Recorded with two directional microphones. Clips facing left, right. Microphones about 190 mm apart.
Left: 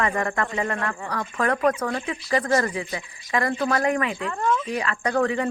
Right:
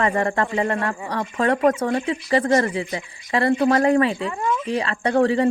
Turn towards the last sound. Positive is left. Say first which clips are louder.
# right 5 dB
turn(degrees=-30)  # may be behind; listen again after turning